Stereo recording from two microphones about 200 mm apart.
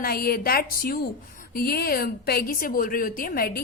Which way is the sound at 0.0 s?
50° left (ahead or behind).